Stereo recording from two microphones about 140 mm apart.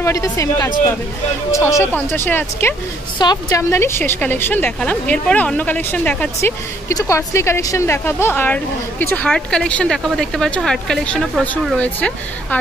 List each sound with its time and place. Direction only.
0.0 s a woman's voice: 20° left (ahead or behind)
3.2 s a woman's voice: 30° left (ahead or behind); by 6.5 s 10° left (ahead or behind)
6.9 s speech: 25° left (ahead or behind)